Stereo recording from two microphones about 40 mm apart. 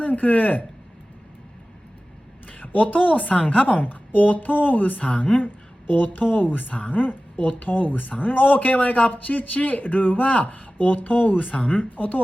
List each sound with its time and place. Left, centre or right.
0.0 s speech: left
2.5 s a woman's voice: left
3.8 s a woman's voice: left
5.0 s a woman's voice: left
5.9 s a woman's voice: left